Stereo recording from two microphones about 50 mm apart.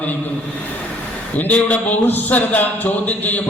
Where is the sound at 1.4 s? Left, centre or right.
Left.